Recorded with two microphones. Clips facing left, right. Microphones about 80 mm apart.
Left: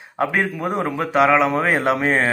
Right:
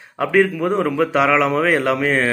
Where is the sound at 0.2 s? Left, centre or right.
Centre.